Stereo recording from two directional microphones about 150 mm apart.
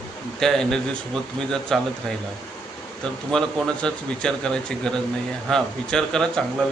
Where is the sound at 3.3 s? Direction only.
5° left (ahead or behind).